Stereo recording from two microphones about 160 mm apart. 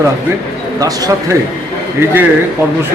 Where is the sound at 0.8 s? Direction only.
20° right (ahead or behind).